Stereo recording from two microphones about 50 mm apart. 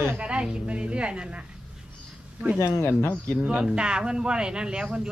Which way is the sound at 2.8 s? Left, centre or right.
Left.